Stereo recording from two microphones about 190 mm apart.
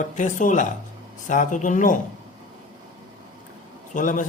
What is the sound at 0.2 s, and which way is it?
Mantra, 40° left (ahead or behind).